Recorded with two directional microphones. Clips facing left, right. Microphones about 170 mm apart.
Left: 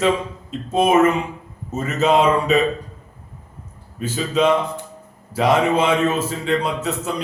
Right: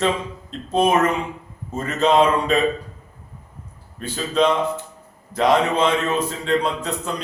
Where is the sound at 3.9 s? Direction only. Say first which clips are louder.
Left 1 dB; 5° left (ahead or behind).